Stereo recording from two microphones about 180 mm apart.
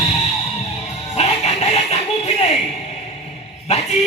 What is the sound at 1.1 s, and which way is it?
Music, 35° left (ahead or behind).